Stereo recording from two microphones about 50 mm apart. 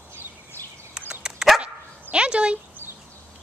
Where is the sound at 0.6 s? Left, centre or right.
Left.